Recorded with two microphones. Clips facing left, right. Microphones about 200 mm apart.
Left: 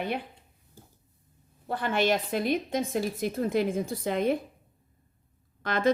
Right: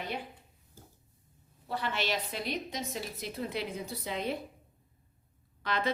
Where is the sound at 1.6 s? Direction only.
50° left (ahead or behind).